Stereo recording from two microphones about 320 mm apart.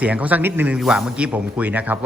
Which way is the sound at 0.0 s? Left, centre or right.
Centre.